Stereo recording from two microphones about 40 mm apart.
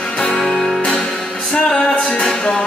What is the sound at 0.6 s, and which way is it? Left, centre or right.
Music, centre.